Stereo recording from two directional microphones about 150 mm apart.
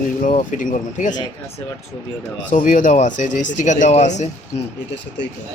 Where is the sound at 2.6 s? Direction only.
60° left (ahead or behind).